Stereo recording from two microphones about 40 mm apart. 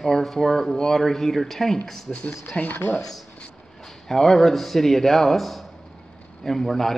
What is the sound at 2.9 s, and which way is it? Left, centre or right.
Speech, centre.